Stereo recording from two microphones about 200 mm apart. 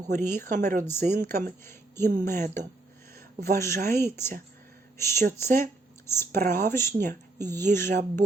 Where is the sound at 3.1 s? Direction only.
50° right (ahead or behind).